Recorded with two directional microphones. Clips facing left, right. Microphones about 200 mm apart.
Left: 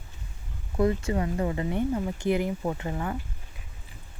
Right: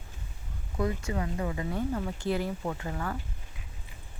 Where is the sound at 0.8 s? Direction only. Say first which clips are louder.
Left 6 dB; 30° left (ahead or behind).